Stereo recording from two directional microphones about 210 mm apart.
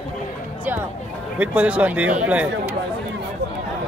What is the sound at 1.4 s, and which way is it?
Speech, 5° right (ahead or behind).